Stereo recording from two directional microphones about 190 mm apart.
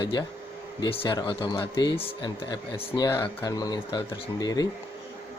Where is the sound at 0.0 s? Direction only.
25° left (ahead or behind).